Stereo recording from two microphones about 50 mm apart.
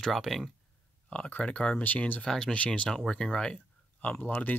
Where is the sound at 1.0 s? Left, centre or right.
Left.